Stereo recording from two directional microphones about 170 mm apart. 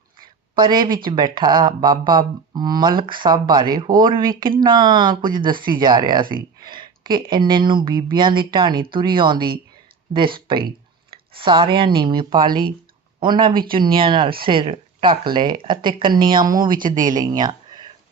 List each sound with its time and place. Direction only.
0.5 s speech: 25° right (ahead or behind)
11.3 s speech: 30° right (ahead or behind)